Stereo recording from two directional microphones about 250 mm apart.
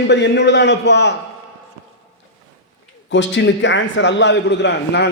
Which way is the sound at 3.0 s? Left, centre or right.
Left.